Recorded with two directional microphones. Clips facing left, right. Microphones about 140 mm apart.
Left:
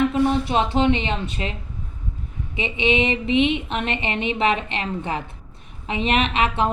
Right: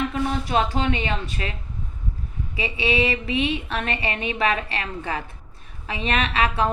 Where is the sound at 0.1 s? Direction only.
25° left (ahead or behind).